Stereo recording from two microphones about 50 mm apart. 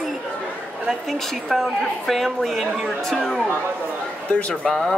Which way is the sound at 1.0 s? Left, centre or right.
Centre.